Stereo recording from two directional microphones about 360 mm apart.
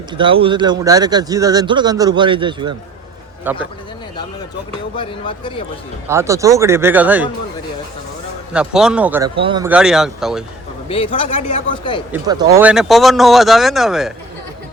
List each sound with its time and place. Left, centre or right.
0.2 s a man's voice: centre
4.9 s a man's voice: centre
6.1 s speech: centre
8.5 s speech: centre
10.8 s a man's voice: centre
12.1 s speech: centre